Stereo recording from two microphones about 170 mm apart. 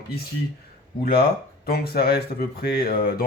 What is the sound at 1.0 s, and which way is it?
A man's voice, 65° left (ahead or behind).